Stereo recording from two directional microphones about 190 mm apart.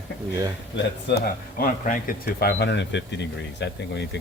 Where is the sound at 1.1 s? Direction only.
50° left (ahead or behind).